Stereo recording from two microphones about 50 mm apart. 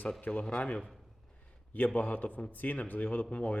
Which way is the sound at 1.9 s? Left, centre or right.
Left.